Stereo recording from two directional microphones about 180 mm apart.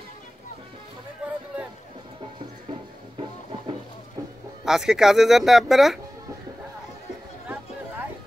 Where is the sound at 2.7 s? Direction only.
30° right (ahead or behind).